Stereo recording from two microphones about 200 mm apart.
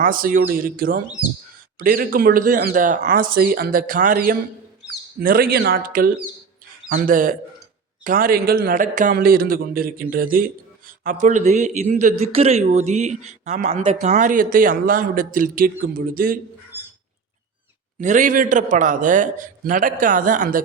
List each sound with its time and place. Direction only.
0.0 s a man's voice: 45° right (ahead or behind)
16.7 s dog: 10° right (ahead or behind)
18.0 s a man's voice: 40° right (ahead or behind)